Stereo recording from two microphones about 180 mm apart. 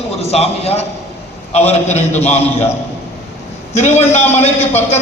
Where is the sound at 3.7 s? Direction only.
40° left (ahead or behind).